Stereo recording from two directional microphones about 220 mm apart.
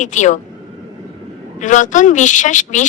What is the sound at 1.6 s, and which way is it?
A woman's voice, 35° left (ahead or behind).